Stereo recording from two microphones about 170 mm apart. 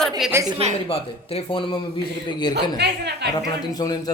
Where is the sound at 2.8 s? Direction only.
75° right (ahead or behind).